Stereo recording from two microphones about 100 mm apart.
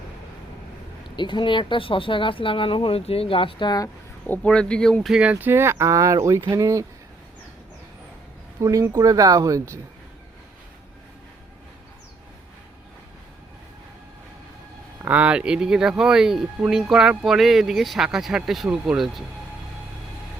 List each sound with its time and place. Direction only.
1.1 s speech: 50° left (ahead or behind)
4.3 s speech: 10° left (ahead or behind)
5.1 s speech: 15° right (ahead or behind); by 6.4 s 35° right (ahead or behind)
6.4 s speech: 45° right (ahead or behind)
8.6 s speech: 30° right (ahead or behind)
15.0 s speech: 15° right (ahead or behind)